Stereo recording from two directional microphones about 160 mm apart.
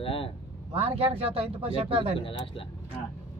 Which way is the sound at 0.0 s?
35° left (ahead or behind).